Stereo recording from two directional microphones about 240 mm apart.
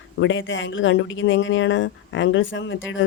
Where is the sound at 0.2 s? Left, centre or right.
Left.